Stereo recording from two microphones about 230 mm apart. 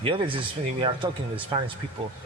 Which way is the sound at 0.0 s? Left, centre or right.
Right.